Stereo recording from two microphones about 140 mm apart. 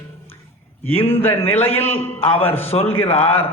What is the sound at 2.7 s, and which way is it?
Speech, 45° left (ahead or behind).